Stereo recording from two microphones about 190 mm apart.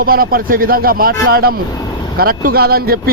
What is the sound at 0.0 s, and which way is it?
Speech, 50° right (ahead or behind).